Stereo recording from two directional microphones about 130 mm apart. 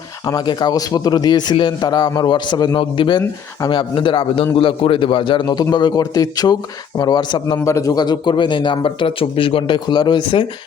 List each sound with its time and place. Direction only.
0.3 s a man's voice: 35° left (ahead or behind)
7.6 s a man's voice: 25° left (ahead or behind)